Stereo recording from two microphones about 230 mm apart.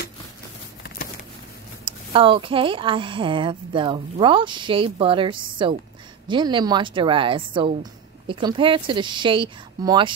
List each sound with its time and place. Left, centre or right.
2.1 s a woman's voice: right